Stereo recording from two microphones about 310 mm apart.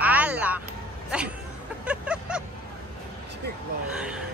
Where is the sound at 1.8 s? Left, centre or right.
Centre.